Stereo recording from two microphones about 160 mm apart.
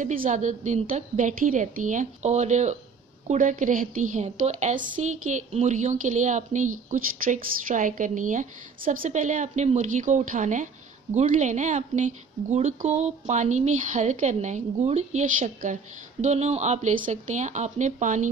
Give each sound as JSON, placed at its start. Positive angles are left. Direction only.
{"t": 0.0, "sound": "a woman's voice", "side_deg": -55}